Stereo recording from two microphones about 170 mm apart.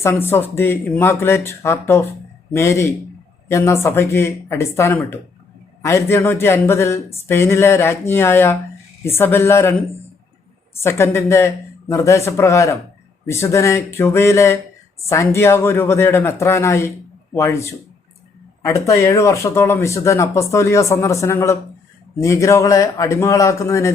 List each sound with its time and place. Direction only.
0.0 s speech: 15° left (ahead or behind)
10.8 s speech: 15° left (ahead or behind)